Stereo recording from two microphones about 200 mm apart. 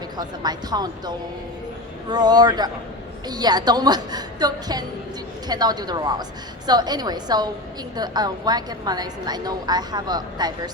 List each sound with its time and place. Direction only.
0.2 s a woman's voice: 20° right (ahead or behind)